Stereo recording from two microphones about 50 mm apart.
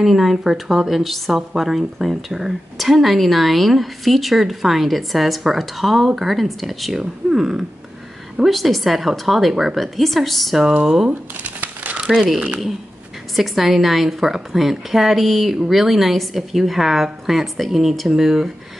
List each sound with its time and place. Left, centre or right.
0.0 s speech: centre
10.7 s speech: centre
11.1 s crumpling: right
12.0 s a sound: centre
13.4 s speech: centre